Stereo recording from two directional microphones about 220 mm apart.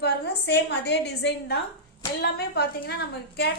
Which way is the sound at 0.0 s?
50° left (ahead or behind).